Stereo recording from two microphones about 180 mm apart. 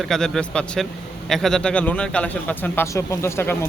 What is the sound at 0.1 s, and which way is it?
A man's voice, 5° left (ahead or behind).